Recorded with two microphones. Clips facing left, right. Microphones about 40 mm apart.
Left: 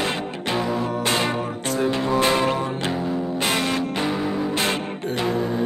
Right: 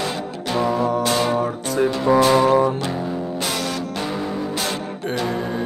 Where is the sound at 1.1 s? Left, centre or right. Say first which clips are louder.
Right 3 dB; left.